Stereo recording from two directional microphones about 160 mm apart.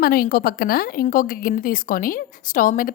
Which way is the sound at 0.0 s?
65° left (ahead or behind).